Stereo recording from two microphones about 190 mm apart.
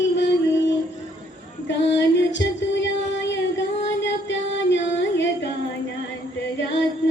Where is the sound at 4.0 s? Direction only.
70° left (ahead or behind).